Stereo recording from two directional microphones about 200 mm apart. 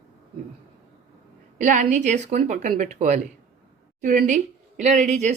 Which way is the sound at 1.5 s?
35° right (ahead or behind).